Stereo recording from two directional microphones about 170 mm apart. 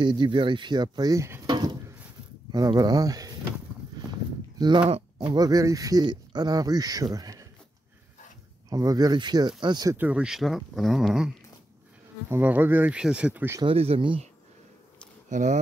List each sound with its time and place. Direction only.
0.0 s speech: 25° right (ahead or behind)
4.6 s speech: 25° right (ahead or behind)
5.2 s speech: 20° right (ahead or behind)
8.6 s speech: 20° right (ahead or behind)
9.9 s speech: 10° right (ahead or behind)
13.6 s speech: 35° right (ahead or behind)
15.2 s speech: 45° right (ahead or behind)